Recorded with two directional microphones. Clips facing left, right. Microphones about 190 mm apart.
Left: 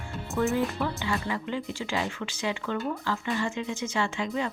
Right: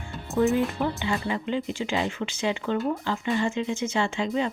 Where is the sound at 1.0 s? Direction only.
25° right (ahead or behind).